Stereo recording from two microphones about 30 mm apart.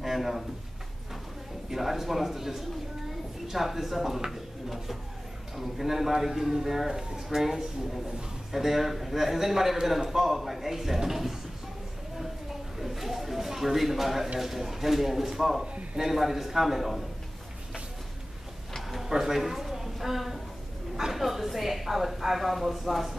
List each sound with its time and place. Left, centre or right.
0.0 s a sound: centre
1.7 s a man's voice: centre
12.7 s a man's voice: centre
15.6 s speech: right
16.0 s a man's voice: centre
18.8 s a sound: centre
19.0 s a man's voice: centre